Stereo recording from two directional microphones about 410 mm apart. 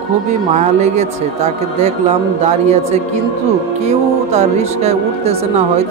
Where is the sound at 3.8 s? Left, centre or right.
Centre.